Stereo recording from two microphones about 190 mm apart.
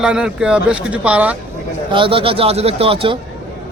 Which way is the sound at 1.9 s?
25° right (ahead or behind).